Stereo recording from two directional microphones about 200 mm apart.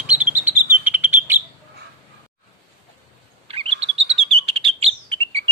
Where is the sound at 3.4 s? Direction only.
30° right (ahead or behind).